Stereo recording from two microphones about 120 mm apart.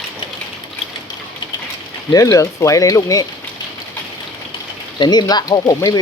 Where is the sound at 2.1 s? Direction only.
25° left (ahead or behind).